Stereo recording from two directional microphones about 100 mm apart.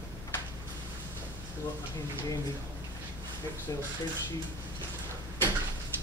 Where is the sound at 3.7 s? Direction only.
35° left (ahead or behind).